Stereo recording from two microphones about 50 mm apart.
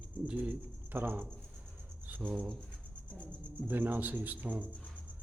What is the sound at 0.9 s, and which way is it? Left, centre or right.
Speech, right.